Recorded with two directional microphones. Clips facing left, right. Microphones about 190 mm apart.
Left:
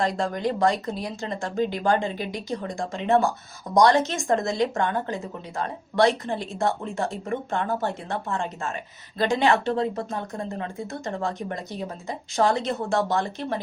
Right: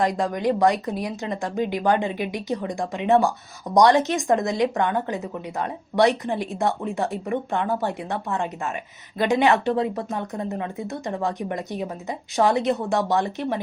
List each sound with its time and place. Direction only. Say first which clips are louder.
0.0 s speech: right 3 dB; 15° right (ahead or behind)